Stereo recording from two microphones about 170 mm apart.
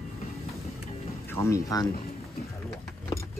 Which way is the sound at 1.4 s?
20° left (ahead or behind).